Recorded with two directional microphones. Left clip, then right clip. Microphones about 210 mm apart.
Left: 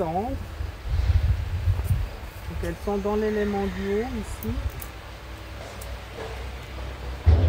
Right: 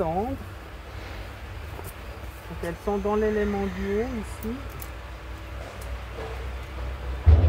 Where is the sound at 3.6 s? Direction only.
45° left (ahead or behind).